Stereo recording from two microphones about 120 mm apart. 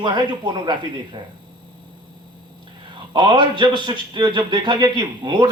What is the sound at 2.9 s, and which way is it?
A man's voice, 40° right (ahead or behind).